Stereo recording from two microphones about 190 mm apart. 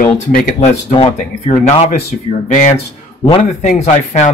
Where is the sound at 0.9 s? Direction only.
30° left (ahead or behind).